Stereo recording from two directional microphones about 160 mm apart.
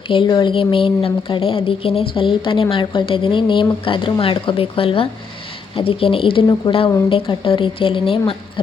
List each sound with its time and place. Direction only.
0.1 s a woman's voice: 30° left (ahead or behind)